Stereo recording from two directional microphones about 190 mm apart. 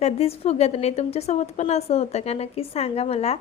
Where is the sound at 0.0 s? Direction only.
35° left (ahead or behind).